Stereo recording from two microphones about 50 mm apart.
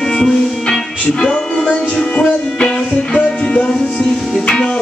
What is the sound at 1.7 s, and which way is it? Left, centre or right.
Music, left.